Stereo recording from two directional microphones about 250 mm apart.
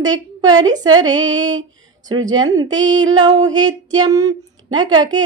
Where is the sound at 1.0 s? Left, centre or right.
Centre.